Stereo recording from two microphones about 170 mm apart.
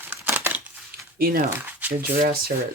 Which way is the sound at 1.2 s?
65° right (ahead or behind).